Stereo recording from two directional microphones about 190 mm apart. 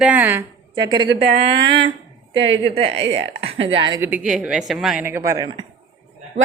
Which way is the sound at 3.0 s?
70° right (ahead or behind).